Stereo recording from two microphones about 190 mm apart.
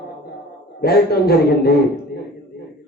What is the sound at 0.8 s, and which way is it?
Speech, 55° left (ahead or behind).